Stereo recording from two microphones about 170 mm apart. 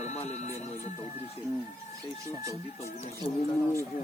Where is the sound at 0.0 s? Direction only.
40° left (ahead or behind).